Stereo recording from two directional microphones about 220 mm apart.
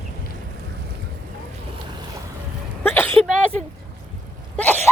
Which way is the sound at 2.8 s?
10° left (ahead or behind).